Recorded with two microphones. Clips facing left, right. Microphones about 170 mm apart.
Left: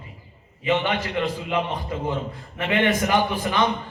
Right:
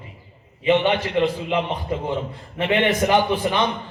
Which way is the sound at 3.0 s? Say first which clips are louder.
Right 3 dB; 20° right (ahead or behind).